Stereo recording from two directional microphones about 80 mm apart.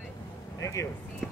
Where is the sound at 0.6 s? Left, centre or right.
Left.